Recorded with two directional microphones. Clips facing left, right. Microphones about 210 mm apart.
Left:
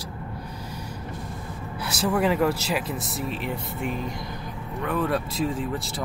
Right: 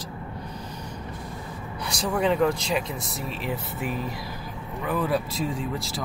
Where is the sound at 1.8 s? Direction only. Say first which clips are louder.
Left 1 dB; 5° left (ahead or behind).